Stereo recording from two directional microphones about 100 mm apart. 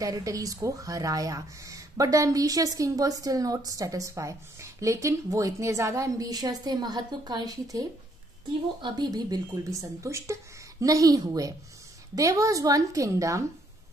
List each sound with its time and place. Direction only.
0.0 s speech: 35° right (ahead or behind)
9.8 s speech: 30° right (ahead or behind)